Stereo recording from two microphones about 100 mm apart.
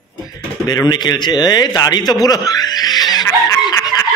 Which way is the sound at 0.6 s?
40° left (ahead or behind).